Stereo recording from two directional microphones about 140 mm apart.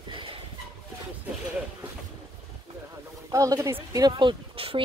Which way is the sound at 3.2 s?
25° right (ahead or behind).